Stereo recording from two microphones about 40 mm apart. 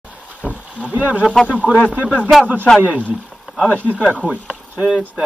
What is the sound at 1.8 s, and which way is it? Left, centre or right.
Speech, left.